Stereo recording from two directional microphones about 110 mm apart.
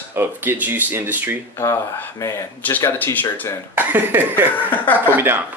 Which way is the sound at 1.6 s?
25° left (ahead or behind).